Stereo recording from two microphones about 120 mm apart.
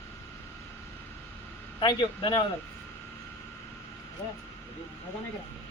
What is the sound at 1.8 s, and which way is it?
Speech, 40° left (ahead or behind).